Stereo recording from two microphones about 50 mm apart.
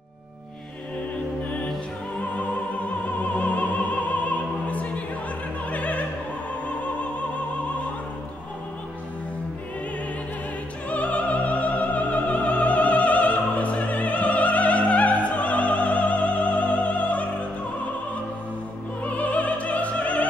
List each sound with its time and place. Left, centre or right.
3.2 s opera: left
5.7 s music: left
10.9 s opera: left
19.0 s music: left